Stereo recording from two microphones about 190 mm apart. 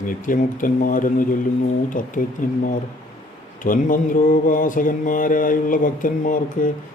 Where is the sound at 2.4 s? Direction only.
45° left (ahead or behind).